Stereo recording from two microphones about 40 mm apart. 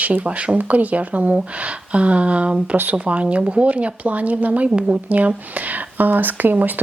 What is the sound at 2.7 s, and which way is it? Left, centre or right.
Speech, right.